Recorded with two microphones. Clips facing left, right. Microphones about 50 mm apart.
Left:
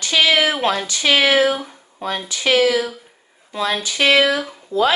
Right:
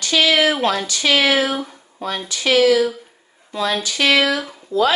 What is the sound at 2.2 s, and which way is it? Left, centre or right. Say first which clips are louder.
Speech: right 2 dB; left.